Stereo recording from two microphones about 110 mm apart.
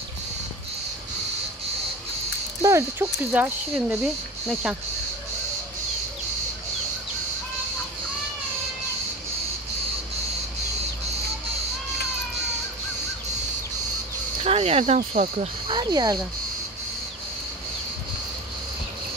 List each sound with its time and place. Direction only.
2.6 s speech: 25° right (ahead or behind)
3.3 s speech: 15° right (ahead or behind)
3.7 s speech: 5° right (ahead or behind)
14.4 s speech: 65° right (ahead or behind); by 15.5 s 90° right
15.7 s speech: 40° right (ahead or behind)